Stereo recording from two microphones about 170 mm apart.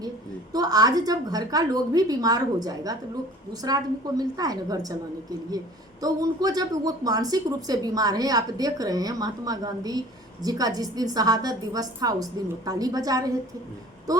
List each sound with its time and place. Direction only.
0.5 s speech: 20° right (ahead or behind)